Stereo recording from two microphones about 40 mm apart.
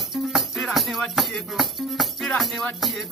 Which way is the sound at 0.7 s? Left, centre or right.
Centre.